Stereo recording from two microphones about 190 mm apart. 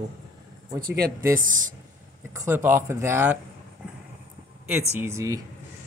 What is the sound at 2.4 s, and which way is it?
Speech, 15° right (ahead or behind).